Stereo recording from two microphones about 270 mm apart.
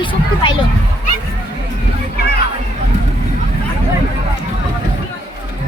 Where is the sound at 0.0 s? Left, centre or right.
Centre.